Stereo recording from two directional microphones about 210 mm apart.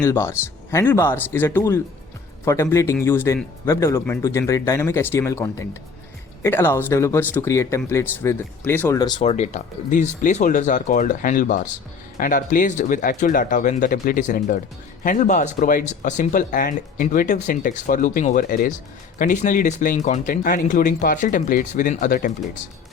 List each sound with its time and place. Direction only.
0.0 s speech: 10° left (ahead or behind); by 22.3 s 40° left (ahead or behind)